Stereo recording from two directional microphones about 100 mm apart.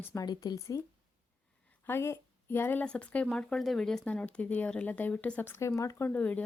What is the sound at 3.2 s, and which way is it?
Speech, centre (ahead or behind).